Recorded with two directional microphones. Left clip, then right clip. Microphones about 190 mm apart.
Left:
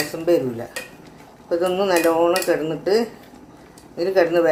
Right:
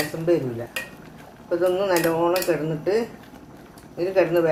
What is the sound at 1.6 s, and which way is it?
Speech, 20° left (ahead or behind).